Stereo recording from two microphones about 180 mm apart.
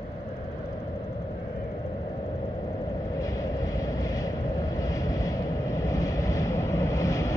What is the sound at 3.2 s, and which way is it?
Vehicle, 20° left (ahead or behind).